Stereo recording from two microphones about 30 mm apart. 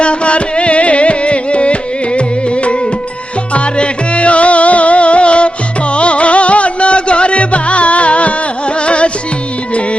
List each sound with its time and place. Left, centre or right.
0.0 s music: left